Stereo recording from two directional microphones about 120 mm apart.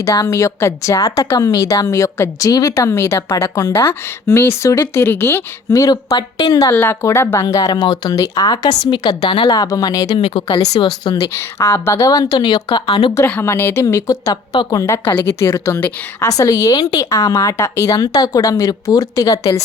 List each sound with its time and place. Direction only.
0.0 s a woman's voice: 30° left (ahead or behind)
6.7 s a woman's voice: 20° left (ahead or behind)
7.4 s a woman's voice: 35° left (ahead or behind)
9.6 s a woman's voice: 30° left (ahead or behind)
10.2 s speech: 50° left (ahead or behind)
10.8 s a woman's voice: 35° left (ahead or behind)
11.3 s a woman's voice: 25° left (ahead or behind); by 13.1 s 40° left (ahead or behind)
13.1 s a woman's voice: 15° left (ahead or behind)
13.8 s a woman's voice: 30° left (ahead or behind)